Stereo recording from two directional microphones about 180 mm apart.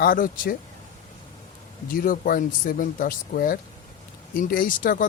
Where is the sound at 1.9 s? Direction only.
50° left (ahead or behind).